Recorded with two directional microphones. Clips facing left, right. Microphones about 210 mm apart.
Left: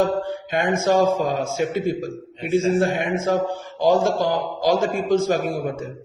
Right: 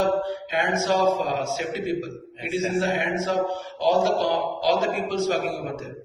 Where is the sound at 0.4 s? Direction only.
50° left (ahead or behind).